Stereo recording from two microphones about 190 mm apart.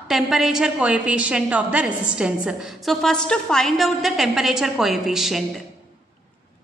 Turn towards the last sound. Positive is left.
turn(degrees=0)  # may be behind; listen again after turning